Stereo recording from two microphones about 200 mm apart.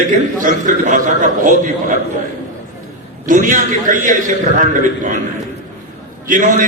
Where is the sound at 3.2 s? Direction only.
40° right (ahead or behind).